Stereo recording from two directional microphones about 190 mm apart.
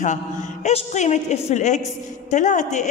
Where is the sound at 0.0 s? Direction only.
40° left (ahead or behind).